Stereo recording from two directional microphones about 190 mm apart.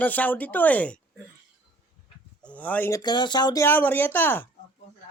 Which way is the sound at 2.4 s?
5° left (ahead or behind).